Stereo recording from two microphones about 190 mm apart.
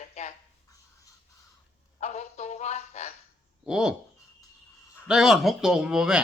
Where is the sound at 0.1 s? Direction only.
35° left (ahead or behind).